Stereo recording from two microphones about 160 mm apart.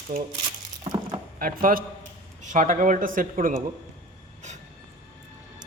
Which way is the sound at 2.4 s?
50° right (ahead or behind).